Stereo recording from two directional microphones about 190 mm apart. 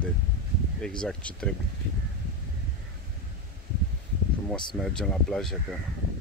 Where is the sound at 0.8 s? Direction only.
5° left (ahead or behind).